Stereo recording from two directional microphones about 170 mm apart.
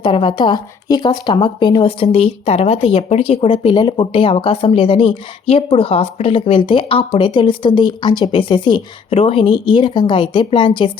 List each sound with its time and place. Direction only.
0.0 s speech: 30° left (ahead or behind)